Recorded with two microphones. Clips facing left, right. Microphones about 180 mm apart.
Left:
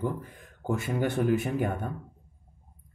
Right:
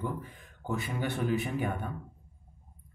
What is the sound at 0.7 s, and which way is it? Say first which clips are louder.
Speech: left 5 dB; 45° left (ahead or behind).